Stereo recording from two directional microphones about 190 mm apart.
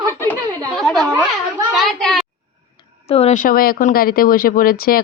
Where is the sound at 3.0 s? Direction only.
30° left (ahead or behind).